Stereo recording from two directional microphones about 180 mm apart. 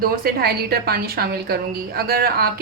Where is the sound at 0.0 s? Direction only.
55° right (ahead or behind).